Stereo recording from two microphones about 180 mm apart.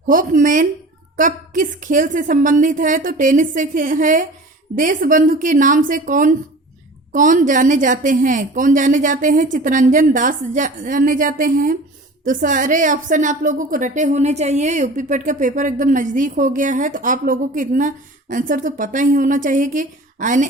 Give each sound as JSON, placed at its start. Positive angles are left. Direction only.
{"t": 0.1, "sound": "a woman's voice", "side_deg": -50}